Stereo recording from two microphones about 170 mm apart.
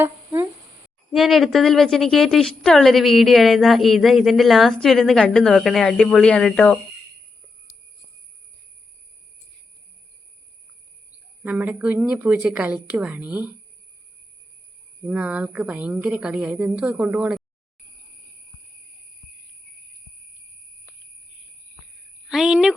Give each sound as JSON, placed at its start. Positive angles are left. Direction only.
{"t": 0.0, "sound": "a sound", "side_deg": -15}
{"t": 1.1, "sound": "a woman's voice", "side_deg": 0}
{"t": 11.4, "sound": "a woman's voice", "side_deg": -10}
{"t": 15.0, "sound": "a woman's voice", "side_deg": -10}
{"t": 22.3, "sound": "speech", "side_deg": 0}